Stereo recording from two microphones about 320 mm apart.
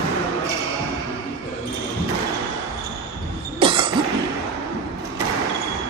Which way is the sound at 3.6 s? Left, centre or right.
Centre.